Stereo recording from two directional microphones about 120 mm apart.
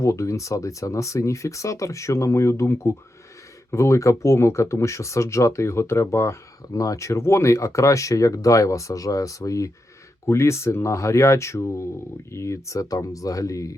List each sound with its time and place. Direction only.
0.0 s speech: 25° left (ahead or behind)